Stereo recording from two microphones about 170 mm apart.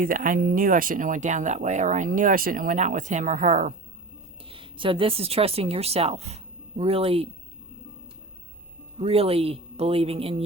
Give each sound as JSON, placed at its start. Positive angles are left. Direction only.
{"t": 0.0, "sound": "speech", "side_deg": -55}
{"t": 4.4, "sound": "speech", "side_deg": -30}
{"t": 9.0, "sound": "speech", "side_deg": -35}